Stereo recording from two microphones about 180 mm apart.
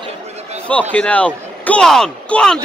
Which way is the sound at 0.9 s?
5° left (ahead or behind).